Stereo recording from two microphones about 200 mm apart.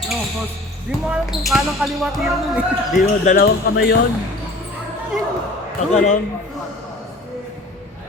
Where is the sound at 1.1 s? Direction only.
Centre (ahead or behind).